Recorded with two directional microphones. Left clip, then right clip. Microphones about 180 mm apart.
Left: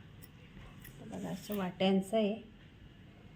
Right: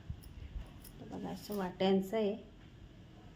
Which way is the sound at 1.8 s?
15° left (ahead or behind).